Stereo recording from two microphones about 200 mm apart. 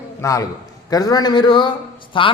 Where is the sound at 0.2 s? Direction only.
15° left (ahead or behind).